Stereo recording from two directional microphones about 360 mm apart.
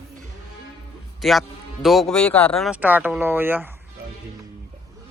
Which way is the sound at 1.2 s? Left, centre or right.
Centre.